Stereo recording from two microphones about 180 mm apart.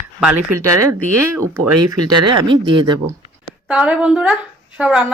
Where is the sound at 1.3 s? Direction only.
15° right (ahead or behind).